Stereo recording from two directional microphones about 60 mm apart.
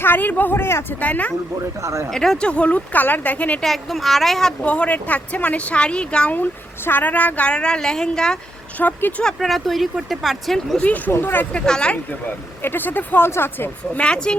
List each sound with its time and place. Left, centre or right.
0.0 s speech: left
0.9 s speech: left
1.8 s speech: right
2.0 s speech: centre
2.5 s speech: left
3.6 s speech: centre
4.6 s speech: left
8.8 s speech: left
9.2 s speech: centre
10.8 s speech: left
11.1 s speech: left
11.5 s speech: centre
12.6 s speech: left
13.9 s speech: centre